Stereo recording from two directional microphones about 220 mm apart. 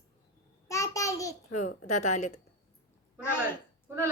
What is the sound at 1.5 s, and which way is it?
Speech, 35° left (ahead or behind).